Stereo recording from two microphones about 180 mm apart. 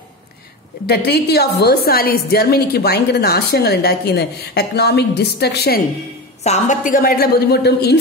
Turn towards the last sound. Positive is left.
turn(degrees=65)  # may be behind; listen again after turning